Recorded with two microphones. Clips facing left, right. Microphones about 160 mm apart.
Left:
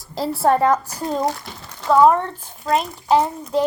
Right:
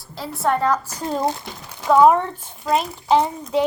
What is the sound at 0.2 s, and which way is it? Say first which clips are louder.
Speech: left 4 dB; 30° left (ahead or behind).